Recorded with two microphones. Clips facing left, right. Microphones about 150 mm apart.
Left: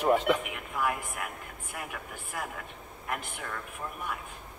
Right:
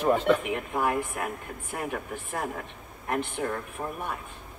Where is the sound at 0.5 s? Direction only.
35° right (ahead or behind).